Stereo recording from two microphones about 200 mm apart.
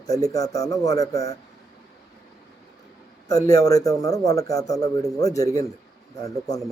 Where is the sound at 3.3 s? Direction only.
15° left (ahead or behind).